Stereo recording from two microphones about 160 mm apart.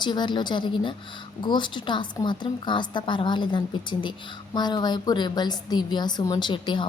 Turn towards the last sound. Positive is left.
turn(degrees=30)  # may be behind; listen again after turning